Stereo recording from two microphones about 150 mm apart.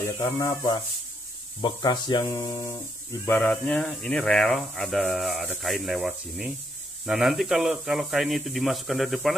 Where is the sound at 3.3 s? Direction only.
10° left (ahead or behind).